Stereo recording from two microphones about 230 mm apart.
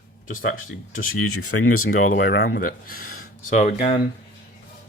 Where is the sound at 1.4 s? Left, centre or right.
Left.